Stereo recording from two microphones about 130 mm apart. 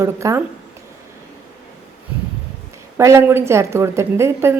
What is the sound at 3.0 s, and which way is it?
A woman's voice, 20° right (ahead or behind).